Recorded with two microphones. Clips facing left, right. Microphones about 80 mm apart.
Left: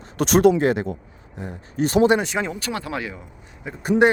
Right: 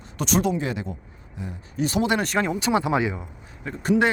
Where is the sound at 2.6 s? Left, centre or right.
Centre.